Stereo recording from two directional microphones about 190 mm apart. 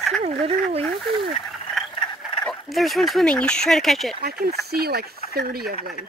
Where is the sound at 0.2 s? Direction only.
30° right (ahead or behind).